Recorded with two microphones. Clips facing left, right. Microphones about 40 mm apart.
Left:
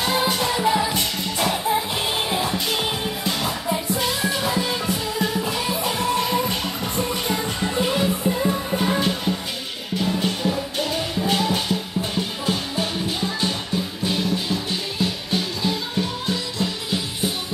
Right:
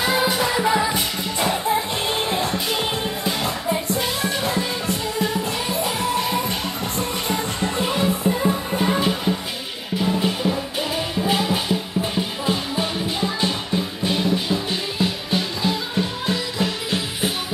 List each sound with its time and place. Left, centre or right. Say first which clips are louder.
0.0 s music: right 2 dB; centre
16.3 s music: right 2 dB; right